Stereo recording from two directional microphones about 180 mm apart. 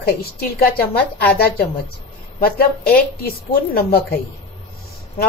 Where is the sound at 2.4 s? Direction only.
55° left (ahead or behind).